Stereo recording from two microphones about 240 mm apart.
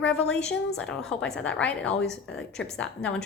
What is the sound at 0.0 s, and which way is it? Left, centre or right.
A woman's voice, centre.